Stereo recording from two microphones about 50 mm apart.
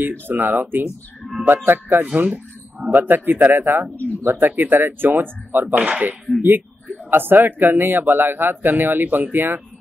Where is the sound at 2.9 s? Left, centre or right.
Right.